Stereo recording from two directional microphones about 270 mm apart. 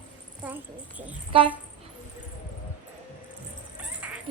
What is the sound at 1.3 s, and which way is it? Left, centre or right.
Speech, centre.